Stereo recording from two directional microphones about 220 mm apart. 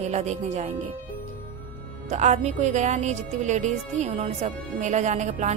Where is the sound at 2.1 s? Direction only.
30° right (ahead or behind).